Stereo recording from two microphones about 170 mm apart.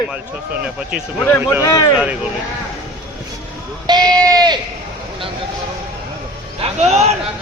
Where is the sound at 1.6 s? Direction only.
25° left (ahead or behind).